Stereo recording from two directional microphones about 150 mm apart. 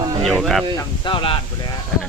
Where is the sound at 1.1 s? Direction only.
35° left (ahead or behind).